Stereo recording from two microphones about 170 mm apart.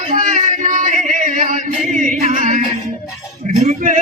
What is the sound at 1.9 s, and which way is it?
Singing, 45° right (ahead or behind).